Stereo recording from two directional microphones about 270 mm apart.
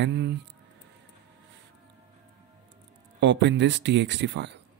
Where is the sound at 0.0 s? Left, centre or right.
Right.